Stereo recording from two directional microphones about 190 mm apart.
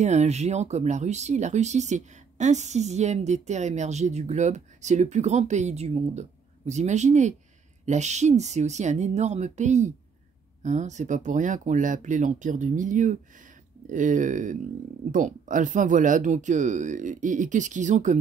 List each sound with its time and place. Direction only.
0.0 s speech: 35° right (ahead or behind)